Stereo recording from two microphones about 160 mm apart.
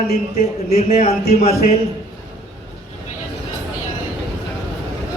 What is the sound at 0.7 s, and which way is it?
Speech, 40° left (ahead or behind).